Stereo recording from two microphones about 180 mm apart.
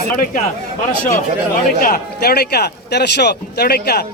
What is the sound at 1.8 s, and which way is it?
Speech, 55° left (ahead or behind).